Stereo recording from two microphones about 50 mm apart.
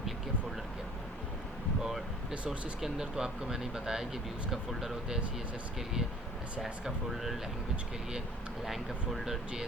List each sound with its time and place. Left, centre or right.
2.3 s speech: right
2.8 s speech: centre
6.6 s speech: centre
8.6 s speech: centre